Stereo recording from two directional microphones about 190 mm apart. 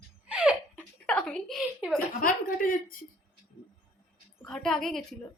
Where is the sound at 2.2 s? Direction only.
45° left (ahead or behind).